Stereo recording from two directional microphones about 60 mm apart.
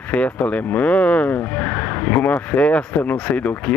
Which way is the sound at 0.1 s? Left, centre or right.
Left.